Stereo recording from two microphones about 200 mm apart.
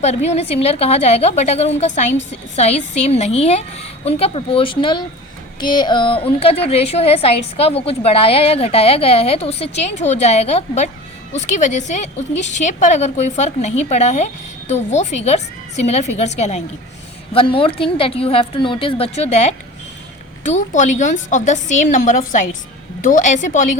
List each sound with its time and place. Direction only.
0.0 s a woman's voice: 35° left (ahead or behind)